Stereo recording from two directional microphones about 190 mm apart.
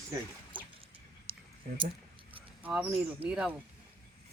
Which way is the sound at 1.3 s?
30° right (ahead or behind).